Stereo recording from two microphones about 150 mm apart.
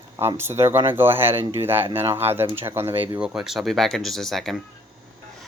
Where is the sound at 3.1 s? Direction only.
5° right (ahead or behind).